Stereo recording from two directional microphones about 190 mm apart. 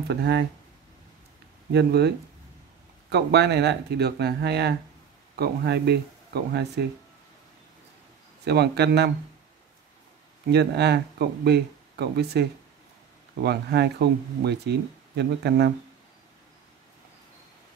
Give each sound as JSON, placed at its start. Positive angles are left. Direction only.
{"t": 0.1, "sound": "speech", "side_deg": -60}
{"t": 1.7, "sound": "speech", "side_deg": -60}
{"t": 8.5, "sound": "speech", "side_deg": -60}
{"t": 10.5, "sound": "speech", "side_deg": -60}